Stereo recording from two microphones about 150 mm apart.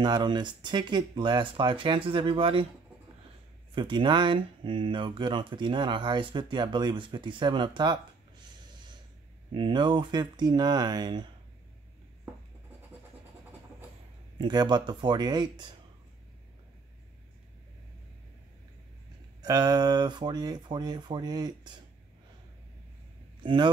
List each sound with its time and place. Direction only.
0.0 s speech: 30° right (ahead or behind)
3.7 s speech: 30° right (ahead or behind)
9.5 s speech: 30° right (ahead or behind)
14.4 s speech: 30° right (ahead or behind)
19.4 s speech: 25° right (ahead or behind)
23.4 s speech: 35° right (ahead or behind)